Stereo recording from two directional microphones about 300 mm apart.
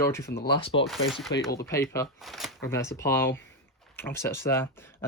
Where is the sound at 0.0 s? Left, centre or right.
Centre.